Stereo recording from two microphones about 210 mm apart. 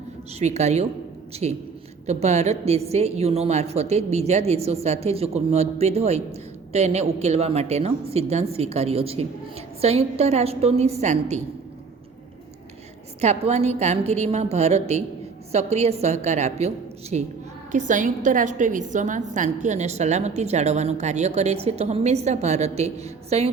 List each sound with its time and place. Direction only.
0.3 s a woman's voice: 30° right (ahead or behind)
13.2 s a woman's voice: 30° right (ahead or behind)